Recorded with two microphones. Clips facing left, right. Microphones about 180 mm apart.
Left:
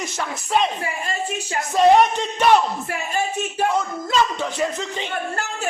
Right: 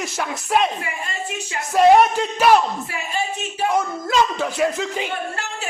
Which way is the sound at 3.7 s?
10° right (ahead or behind).